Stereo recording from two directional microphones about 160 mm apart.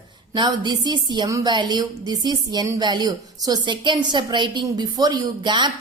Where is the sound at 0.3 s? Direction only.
30° right (ahead or behind).